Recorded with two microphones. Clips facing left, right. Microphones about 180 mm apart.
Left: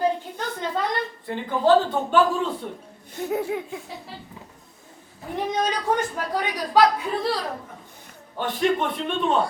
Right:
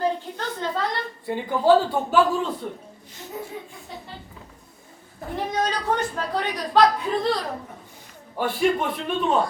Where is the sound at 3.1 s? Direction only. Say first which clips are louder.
Left 10 dB; 65° left (ahead or behind).